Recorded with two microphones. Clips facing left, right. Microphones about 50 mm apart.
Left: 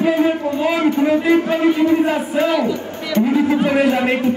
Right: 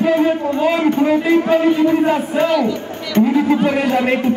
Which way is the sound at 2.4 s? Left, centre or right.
Centre.